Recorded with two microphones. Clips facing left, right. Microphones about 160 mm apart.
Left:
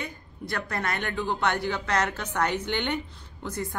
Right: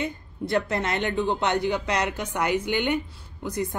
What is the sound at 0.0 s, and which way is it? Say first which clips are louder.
A woman's voice: right 7 dB; 20° right (ahead or behind).